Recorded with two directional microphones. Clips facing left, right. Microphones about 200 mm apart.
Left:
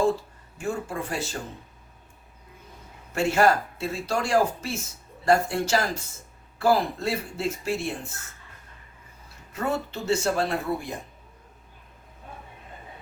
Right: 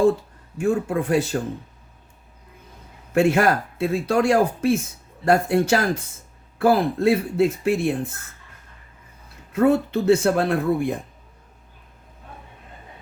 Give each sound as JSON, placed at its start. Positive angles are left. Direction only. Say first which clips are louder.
{"t": 0.6, "sound": "speech", "louder": "right 8 dB", "side_deg": -55}
{"t": 3.2, "sound": "speech", "louder": "right 4 dB", "side_deg": -55}
{"t": 9.5, "sound": "speech", "louder": "right 10 dB", "side_deg": -55}